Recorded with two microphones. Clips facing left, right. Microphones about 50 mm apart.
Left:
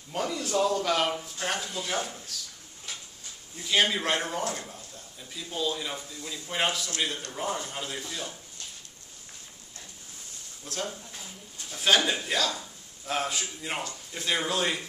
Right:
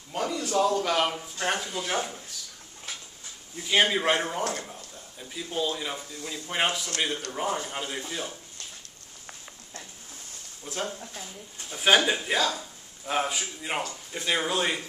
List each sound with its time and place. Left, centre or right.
0.1 s a man's voice: centre
3.6 s a man's voice: centre
10.6 s a man's voice: centre